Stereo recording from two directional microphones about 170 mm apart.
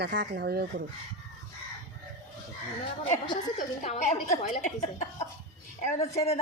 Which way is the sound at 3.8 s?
40° left (ahead or behind).